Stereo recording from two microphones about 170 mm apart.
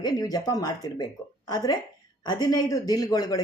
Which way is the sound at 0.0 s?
25° left (ahead or behind).